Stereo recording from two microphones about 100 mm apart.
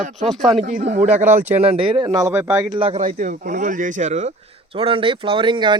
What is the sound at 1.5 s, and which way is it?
Speech, 80° right.